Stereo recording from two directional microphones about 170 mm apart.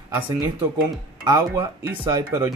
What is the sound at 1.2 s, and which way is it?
Speech, 20° right (ahead or behind).